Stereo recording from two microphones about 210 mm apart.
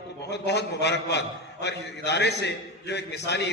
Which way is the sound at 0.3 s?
55° left (ahead or behind).